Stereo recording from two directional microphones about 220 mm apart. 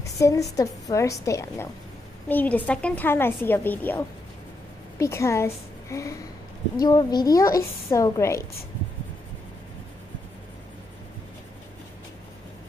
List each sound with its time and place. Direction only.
0.0 s a woman's voice: 15° left (ahead or behind)